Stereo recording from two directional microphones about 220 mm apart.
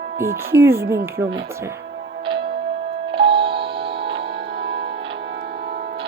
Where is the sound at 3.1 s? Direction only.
25° right (ahead or behind).